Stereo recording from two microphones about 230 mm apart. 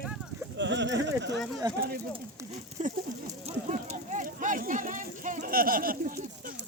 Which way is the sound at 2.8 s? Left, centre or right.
Right.